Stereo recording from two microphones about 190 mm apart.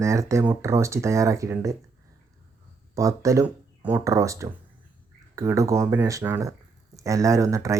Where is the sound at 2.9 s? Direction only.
15° right (ahead or behind).